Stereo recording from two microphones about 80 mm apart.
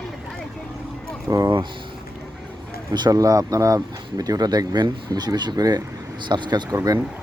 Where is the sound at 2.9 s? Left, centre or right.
Right.